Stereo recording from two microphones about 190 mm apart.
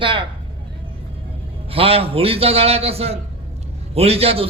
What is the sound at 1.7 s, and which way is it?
A man's voice, 30° right (ahead or behind).